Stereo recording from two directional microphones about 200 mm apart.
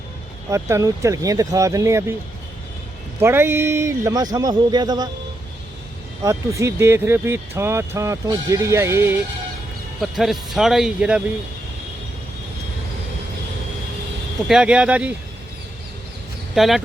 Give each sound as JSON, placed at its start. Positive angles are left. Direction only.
{"t": 0.5, "sound": "speech", "side_deg": -15}
{"t": 3.2, "sound": "speech", "side_deg": -10}
{"t": 6.2, "sound": "speech", "side_deg": -15}
{"t": 10.0, "sound": "speech", "side_deg": 0}
{"t": 14.4, "sound": "speech", "side_deg": -5}
{"t": 16.6, "sound": "speech", "side_deg": 0}